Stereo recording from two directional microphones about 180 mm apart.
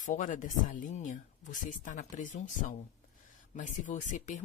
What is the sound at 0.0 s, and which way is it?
Speech, 45° left (ahead or behind).